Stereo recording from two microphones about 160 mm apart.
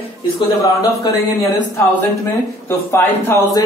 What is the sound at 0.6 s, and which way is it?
A man's voice, 20° left (ahead or behind).